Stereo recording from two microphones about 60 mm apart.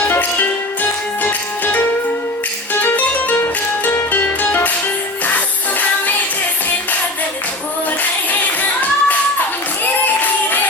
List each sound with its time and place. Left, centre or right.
0.1 s music: left
2.8 s music: left
8.3 s music: left
9.8 s a sound: left